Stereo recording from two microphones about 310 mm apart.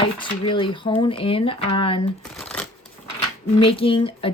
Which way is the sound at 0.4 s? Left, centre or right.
Centre.